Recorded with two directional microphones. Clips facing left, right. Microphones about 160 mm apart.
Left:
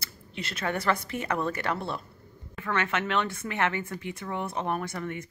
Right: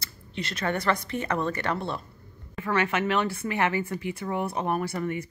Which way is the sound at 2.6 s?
10° right (ahead or behind).